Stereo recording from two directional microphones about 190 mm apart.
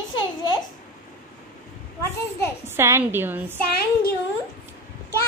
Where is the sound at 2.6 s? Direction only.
15° right (ahead or behind).